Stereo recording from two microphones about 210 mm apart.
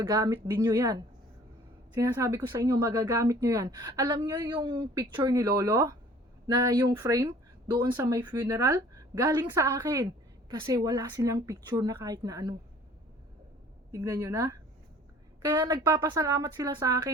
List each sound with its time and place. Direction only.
0.0 s a woman's voice: 20° right (ahead or behind)
2.0 s a woman's voice: 15° right (ahead or behind)
7.9 s speech: 10° right (ahead or behind)
13.9 s a woman's voice: 15° right (ahead or behind)